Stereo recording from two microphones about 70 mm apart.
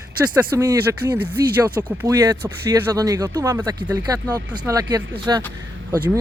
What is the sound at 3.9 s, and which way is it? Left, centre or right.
Speech, right.